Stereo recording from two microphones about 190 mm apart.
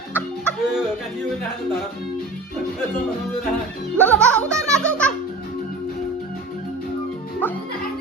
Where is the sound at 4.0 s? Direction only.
10° left (ahead or behind).